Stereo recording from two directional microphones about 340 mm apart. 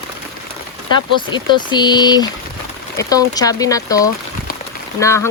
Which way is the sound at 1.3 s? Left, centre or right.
Centre.